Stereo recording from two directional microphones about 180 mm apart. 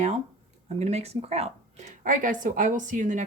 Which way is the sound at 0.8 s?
35° right (ahead or behind).